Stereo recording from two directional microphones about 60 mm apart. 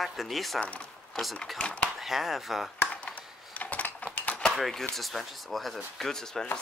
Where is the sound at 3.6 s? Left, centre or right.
Left.